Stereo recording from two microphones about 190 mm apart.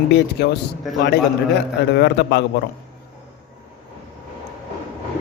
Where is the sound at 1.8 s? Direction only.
65° left (ahead or behind).